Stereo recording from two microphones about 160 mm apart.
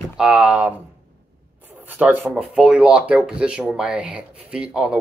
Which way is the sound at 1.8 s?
10° right (ahead or behind).